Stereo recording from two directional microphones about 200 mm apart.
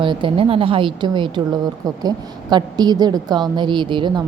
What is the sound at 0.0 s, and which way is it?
Speech, 25° right (ahead or behind).